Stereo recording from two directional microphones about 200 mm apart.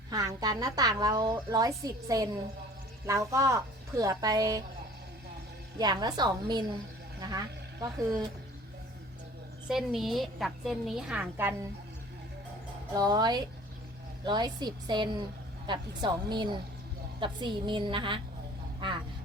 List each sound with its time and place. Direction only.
0.1 s a woman's voice: 15° right (ahead or behind)
5.8 s a woman's voice: 20° right (ahead or behind)
9.6 s a woman's voice: centre (ahead or behind)
13.0 s a woman's voice: 20° right (ahead or behind)